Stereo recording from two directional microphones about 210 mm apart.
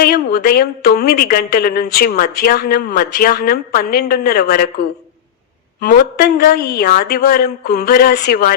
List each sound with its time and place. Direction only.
0.0 s a woman's voice: 45° left (ahead or behind)
5.8 s a woman's voice: 45° left (ahead or behind)